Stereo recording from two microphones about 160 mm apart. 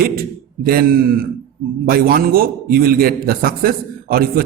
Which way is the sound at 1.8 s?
65° right (ahead or behind).